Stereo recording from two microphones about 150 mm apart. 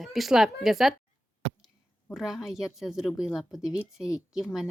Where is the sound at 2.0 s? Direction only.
Centre (ahead or behind).